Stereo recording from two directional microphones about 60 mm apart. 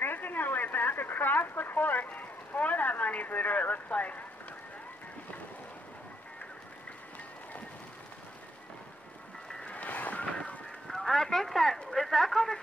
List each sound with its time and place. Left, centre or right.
0.0 s speech: left
9.5 s music: centre
9.8 s vehicle: left
10.9 s speech: centre
11.9 s a sound: centre